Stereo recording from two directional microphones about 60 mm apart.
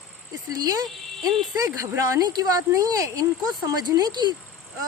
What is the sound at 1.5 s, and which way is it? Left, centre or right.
Speech, right.